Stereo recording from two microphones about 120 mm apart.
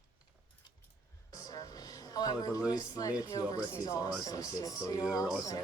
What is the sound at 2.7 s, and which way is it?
Speech, 35° left (ahead or behind).